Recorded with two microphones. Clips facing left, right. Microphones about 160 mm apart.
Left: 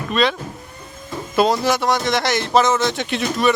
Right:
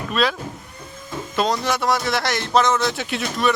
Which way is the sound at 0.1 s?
Centre (ahead or behind).